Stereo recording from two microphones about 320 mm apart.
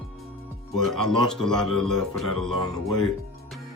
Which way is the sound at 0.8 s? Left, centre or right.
Centre.